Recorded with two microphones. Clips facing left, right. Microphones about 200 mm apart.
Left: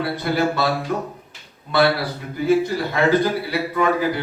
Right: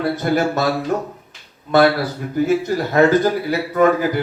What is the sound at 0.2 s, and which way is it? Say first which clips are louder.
Speech: right 2 dB; 45° right (ahead or behind).